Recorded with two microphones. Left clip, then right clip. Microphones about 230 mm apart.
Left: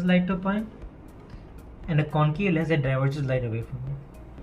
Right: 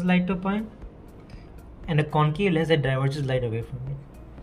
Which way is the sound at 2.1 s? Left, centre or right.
Right.